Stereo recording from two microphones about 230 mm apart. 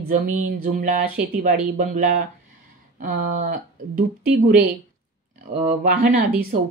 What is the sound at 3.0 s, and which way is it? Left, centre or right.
A woman's voice, right.